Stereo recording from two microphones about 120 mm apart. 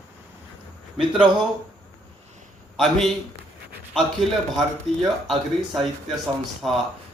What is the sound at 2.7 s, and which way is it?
A man's voice, centre (ahead or behind).